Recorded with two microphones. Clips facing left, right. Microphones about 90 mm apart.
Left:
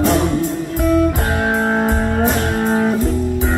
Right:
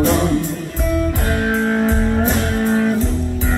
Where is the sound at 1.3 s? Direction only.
20° left (ahead or behind).